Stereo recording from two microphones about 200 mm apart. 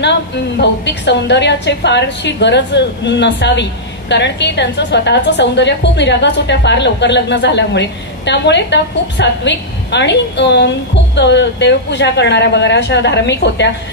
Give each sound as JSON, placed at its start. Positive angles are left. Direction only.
{"t": 0.6, "sound": "a woman's voice", "side_deg": 60}